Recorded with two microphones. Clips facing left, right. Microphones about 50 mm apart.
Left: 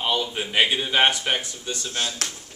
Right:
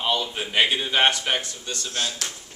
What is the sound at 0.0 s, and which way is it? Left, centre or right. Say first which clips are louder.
A man's voice: even; centre.